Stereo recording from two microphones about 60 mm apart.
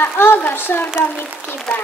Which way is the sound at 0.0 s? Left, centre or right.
Left.